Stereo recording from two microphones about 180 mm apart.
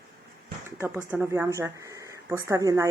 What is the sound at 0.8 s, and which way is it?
Speech, 10° right (ahead or behind).